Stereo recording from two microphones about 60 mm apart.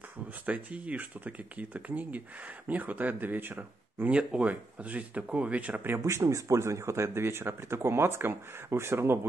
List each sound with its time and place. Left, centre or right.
0.5 s speech: right
4.1 s speech: centre
6.0 s speech: right